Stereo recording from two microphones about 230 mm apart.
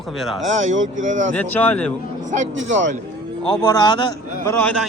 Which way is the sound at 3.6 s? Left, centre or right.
Centre.